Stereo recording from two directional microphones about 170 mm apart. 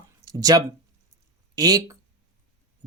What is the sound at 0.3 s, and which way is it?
Speech, 20° right (ahead or behind).